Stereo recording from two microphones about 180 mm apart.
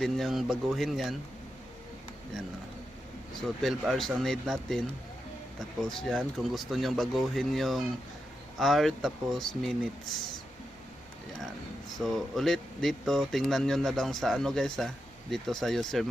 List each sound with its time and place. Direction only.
0.0 s speech: centre (ahead or behind)
3.6 s speech: centre (ahead or behind)
11.9 s speech: centre (ahead or behind)